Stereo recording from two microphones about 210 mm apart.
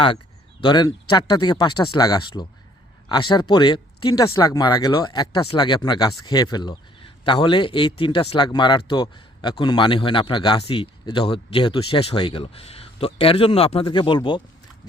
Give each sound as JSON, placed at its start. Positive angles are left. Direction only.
{"t": 0.6, "sound": "a man's voice", "side_deg": 20}